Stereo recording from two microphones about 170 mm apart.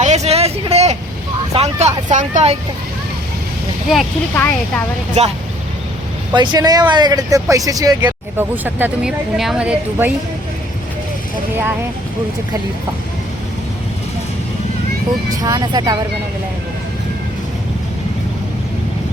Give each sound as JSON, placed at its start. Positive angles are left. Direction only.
{"t": 0.0, "sound": "vehicle", "side_deg": -40}
{"t": 1.5, "sound": "speech", "side_deg": -40}
{"t": 3.9, "sound": "speech", "side_deg": 0}
{"t": 5.2, "sound": "speech", "side_deg": -40}
{"t": 6.3, "sound": "speech", "side_deg": -25}
{"t": 8.6, "sound": "speech", "side_deg": -5}
{"t": 15.4, "sound": "speech", "side_deg": -20}